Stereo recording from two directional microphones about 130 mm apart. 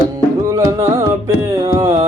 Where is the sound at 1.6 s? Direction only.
25° right (ahead or behind).